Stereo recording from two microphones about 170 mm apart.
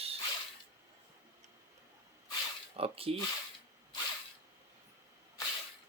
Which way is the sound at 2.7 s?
35° right (ahead or behind).